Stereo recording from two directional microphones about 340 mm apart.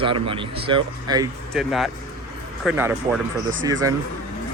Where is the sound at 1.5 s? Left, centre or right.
Centre.